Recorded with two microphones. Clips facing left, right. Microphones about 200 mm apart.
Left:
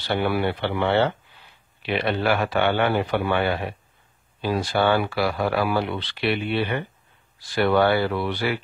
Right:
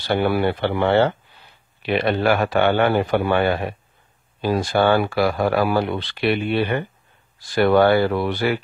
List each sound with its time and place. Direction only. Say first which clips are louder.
0.1 s speech: right 4 dB; 45° right (ahead or behind)